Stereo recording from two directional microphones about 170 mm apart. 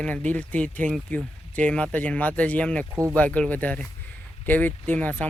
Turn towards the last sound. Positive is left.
turn(degrees=10)  # may be behind; listen again after turning